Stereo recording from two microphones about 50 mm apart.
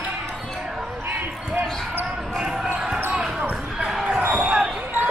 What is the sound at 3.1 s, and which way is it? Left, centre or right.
Basketball bounce, right.